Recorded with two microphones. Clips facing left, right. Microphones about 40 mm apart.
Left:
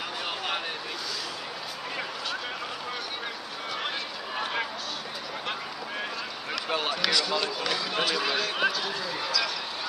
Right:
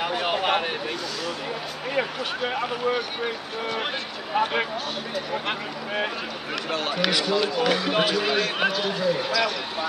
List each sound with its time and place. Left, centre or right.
0.0 s a sound: right
2.0 s a man's voice: right
4.4 s a man's voice: right
8.1 s a man's voice: centre